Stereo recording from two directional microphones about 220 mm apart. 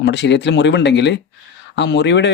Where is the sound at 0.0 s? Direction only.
50° left (ahead or behind).